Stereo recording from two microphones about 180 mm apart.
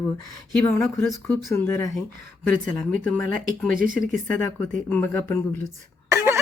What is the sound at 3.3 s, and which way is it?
Speech, 50° right (ahead or behind).